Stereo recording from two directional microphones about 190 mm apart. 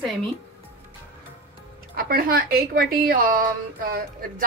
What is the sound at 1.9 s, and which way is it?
Speech, 50° right (ahead or behind).